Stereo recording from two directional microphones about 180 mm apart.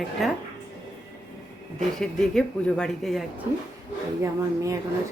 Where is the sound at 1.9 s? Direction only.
5° left (ahead or behind).